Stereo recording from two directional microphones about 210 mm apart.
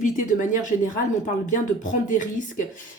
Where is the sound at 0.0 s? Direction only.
40° left (ahead or behind).